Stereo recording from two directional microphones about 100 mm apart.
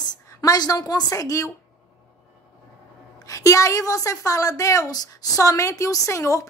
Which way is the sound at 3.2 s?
35° left (ahead or behind).